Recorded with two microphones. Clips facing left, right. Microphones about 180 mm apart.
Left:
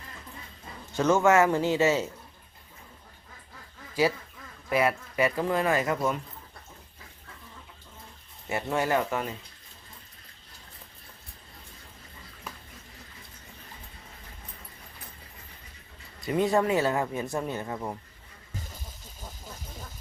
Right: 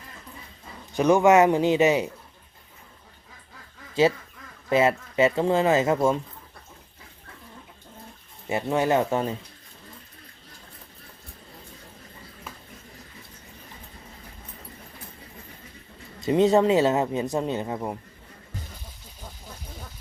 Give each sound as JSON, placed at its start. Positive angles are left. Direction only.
{"t": 0.9, "sound": "speech", "side_deg": -15}
{"t": 4.0, "sound": "speech", "side_deg": -25}
{"t": 8.4, "sound": "speech", "side_deg": -20}
{"t": 16.2, "sound": "speech", "side_deg": -20}